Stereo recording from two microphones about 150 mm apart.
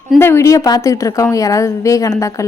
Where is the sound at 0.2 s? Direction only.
15° left (ahead or behind).